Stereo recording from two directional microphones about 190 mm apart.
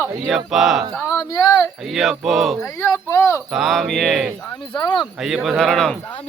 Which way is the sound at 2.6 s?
15° left (ahead or behind).